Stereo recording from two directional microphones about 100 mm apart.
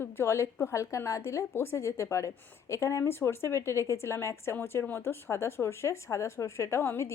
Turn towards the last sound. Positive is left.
turn(degrees=25)  # may be behind; listen again after turning